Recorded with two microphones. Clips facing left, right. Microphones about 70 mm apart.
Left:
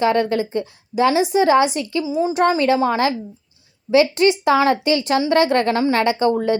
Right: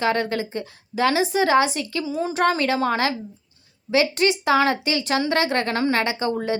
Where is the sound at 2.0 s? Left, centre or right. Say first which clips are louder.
Left 6 dB; centre.